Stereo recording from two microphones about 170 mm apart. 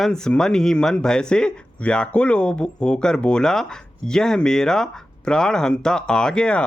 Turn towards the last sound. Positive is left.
turn(degrees=5)  # may be behind; listen again after turning